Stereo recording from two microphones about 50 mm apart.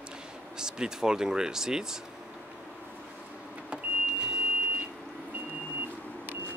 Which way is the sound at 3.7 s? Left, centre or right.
Right.